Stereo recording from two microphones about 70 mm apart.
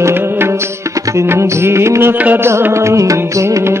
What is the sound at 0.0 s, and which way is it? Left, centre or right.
Music, right.